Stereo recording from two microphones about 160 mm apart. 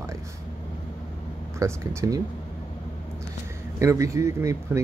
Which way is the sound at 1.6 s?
20° right (ahead or behind).